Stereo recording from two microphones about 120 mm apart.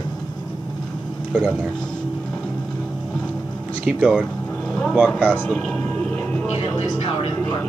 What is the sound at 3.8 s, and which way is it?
Speech, 5° right (ahead or behind).